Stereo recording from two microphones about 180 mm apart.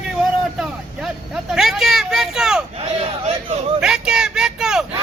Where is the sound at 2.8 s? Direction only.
35° right (ahead or behind).